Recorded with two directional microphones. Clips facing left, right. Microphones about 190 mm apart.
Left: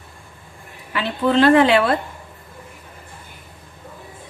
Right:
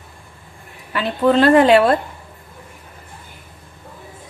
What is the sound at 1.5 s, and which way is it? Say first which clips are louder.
Speech: right 2 dB; 45° right (ahead or behind).